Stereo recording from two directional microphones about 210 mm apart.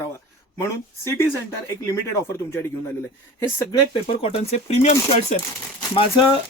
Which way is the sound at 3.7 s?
25° left (ahead or behind).